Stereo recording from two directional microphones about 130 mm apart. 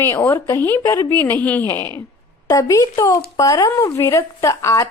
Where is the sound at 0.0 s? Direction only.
15° left (ahead or behind).